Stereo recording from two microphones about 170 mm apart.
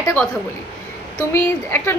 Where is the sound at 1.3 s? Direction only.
15° left (ahead or behind).